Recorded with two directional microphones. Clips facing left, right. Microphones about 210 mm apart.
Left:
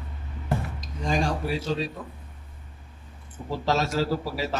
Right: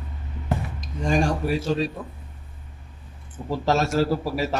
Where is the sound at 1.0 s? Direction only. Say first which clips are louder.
Right 4 dB; 50° right (ahead or behind).